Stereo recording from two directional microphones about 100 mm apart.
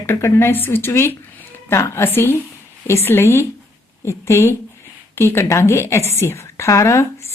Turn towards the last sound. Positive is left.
turn(degrees=30)  # may be behind; listen again after turning